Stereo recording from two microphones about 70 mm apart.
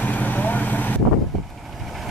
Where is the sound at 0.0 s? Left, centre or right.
Left.